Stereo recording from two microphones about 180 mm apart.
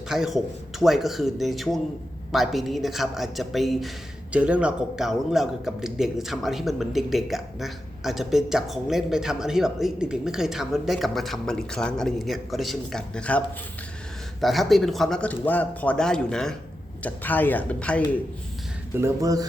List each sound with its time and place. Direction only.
0.1 s a woman's voice: centre (ahead or behind)
14.4 s a woman's voice: centre (ahead or behind)
18.9 s speech: 15° right (ahead or behind)